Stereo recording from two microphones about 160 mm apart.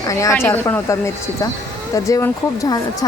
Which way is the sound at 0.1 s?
20° left (ahead or behind).